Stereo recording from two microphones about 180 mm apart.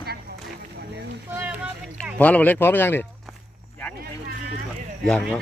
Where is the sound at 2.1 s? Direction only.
10° left (ahead or behind).